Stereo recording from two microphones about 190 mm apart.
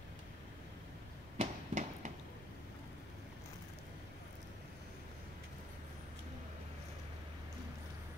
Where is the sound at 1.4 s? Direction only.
40° right (ahead or behind).